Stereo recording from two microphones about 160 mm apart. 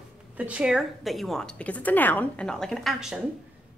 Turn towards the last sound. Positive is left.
turn(degrees=0)  # may be behind; listen again after turning